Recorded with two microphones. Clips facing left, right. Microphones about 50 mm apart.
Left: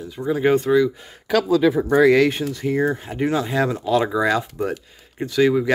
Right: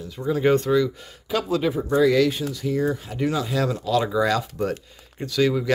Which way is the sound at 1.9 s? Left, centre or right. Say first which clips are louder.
Left 2 dB; left.